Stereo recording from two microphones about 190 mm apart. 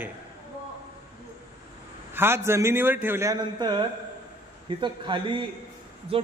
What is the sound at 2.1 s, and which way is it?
A man's voice, 10° right (ahead or behind).